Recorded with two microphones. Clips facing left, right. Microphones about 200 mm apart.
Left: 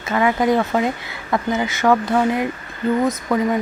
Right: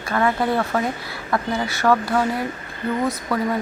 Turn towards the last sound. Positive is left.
turn(degrees=20)  # may be behind; listen again after turning